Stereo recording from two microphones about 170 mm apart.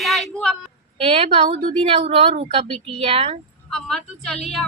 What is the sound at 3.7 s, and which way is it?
Speech, 5° left (ahead or behind).